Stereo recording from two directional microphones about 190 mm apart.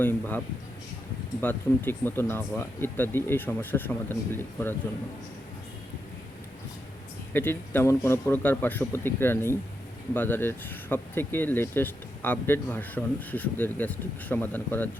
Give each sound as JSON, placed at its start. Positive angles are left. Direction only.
{"t": 0.0, "sound": "speech", "side_deg": 10}
{"t": 7.3, "sound": "speech", "side_deg": 10}